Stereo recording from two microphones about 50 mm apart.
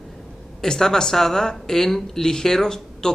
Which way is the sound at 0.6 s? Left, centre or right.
Centre.